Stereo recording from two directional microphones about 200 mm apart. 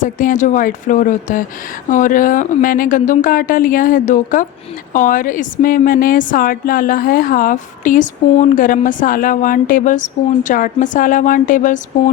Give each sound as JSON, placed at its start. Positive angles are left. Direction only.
{"t": 0.0, "sound": "a woman's voice", "side_deg": 40}